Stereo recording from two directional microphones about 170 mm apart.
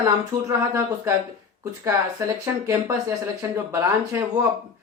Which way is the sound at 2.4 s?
20° right (ahead or behind).